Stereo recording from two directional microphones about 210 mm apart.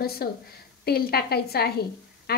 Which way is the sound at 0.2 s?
45° left (ahead or behind).